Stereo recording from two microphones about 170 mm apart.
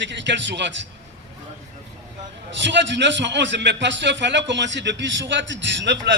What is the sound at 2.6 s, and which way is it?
A man's voice, 90° right.